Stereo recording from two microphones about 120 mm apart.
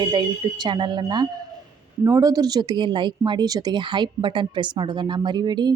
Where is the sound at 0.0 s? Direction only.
35° right (ahead or behind).